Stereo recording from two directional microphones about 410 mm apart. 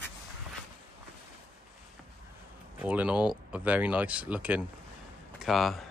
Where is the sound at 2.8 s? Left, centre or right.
Centre.